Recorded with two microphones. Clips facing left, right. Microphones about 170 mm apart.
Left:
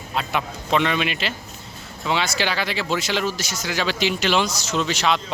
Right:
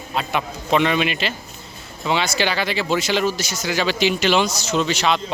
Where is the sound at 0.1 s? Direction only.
Centre (ahead or behind).